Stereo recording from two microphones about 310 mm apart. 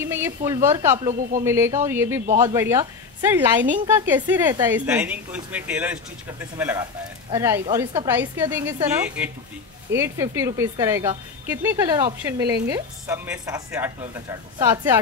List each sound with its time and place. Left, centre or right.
0.0 s a sound: centre
0.4 s speech: centre
1.4 s speech: centre
2.2 s speech: right
2.5 s a woman's voice: centre